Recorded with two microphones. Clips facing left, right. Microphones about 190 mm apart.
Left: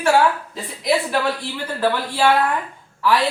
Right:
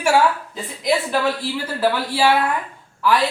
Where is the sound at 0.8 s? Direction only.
Centre (ahead or behind).